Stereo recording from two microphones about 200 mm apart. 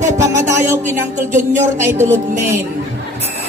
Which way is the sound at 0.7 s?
35° right (ahead or behind).